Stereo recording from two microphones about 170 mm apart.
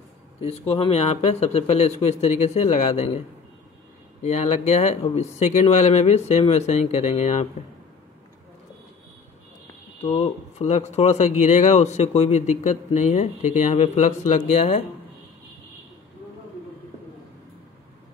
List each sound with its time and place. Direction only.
0.4 s speech: 35° left (ahead or behind)
4.2 s speech: 40° left (ahead or behind)
10.0 s speech: 40° left (ahead or behind)